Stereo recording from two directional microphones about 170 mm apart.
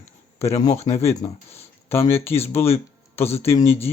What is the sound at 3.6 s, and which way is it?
Speech, 35° left (ahead or behind).